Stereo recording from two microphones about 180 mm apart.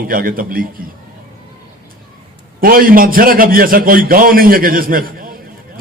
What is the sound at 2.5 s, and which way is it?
A man's voice, 50° right (ahead or behind).